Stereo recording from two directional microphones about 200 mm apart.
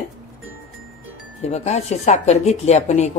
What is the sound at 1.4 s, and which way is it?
Speech, 35° left (ahead or behind).